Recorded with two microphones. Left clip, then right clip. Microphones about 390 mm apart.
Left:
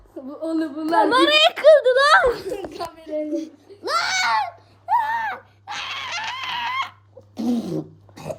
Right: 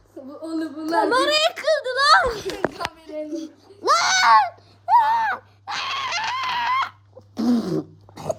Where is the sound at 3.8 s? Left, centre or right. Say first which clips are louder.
Right 4 dB; centre.